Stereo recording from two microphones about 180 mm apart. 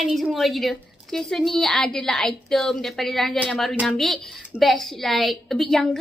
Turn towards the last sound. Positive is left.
turn(degrees=0)  # may be behind; listen again after turning